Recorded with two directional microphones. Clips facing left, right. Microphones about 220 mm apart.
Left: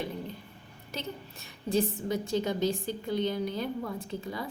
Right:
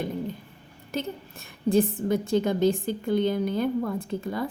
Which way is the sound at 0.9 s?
50° right (ahead or behind).